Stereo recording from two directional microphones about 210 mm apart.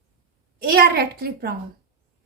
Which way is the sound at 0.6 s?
45° right (ahead or behind).